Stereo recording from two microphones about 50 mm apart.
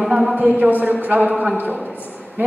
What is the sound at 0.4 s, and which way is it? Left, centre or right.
Speech, right.